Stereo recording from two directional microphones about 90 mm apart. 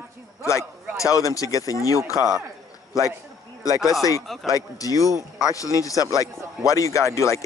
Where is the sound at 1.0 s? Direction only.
40° left (ahead or behind).